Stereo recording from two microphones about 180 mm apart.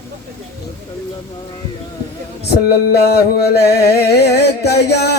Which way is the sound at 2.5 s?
60° left (ahead or behind).